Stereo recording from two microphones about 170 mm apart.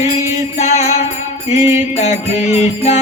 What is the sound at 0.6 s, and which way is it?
Music, 40° left (ahead or behind).